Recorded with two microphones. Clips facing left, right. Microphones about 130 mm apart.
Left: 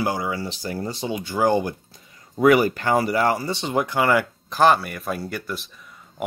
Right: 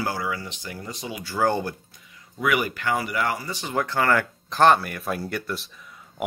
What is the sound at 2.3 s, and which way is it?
Speech, 40° left (ahead or behind).